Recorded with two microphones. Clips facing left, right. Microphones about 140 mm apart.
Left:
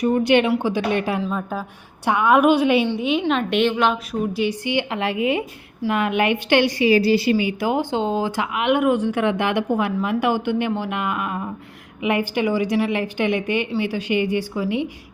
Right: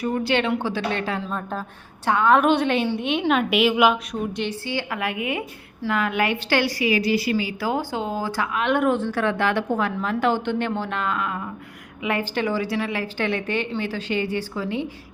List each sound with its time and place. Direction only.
0.0 s a woman's voice: 20° left (ahead or behind)
1.2 s a woman's voice: 5° left (ahead or behind)
4.1 s a woman's voice: 5° left (ahead or behind)
4.6 s a woman's voice: 20° left (ahead or behind)